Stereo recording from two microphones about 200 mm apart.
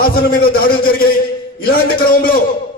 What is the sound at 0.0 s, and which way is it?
A man's voice, 50° left (ahead or behind).